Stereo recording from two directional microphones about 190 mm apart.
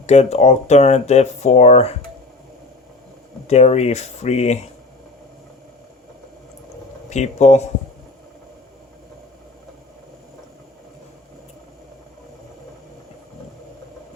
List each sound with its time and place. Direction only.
0.0 s speech: 35° left (ahead or behind)
3.4 s speech: 35° left (ahead or behind)
7.1 s speech: 35° left (ahead or behind)